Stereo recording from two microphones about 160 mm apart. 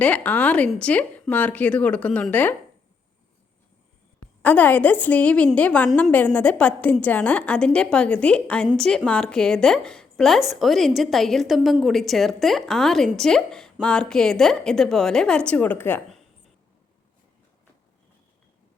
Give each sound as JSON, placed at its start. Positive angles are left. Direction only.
{"t": 0.0, "sound": "a woman's voice", "side_deg": 10}
{"t": 4.4, "sound": "a woman's voice", "side_deg": 10}